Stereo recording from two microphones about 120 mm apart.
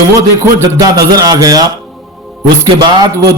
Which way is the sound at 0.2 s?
30° right (ahead or behind).